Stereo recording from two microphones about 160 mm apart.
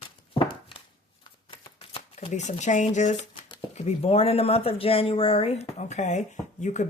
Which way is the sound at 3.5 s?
40° left (ahead or behind).